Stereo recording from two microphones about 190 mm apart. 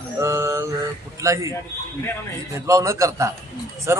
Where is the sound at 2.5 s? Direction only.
15° right (ahead or behind).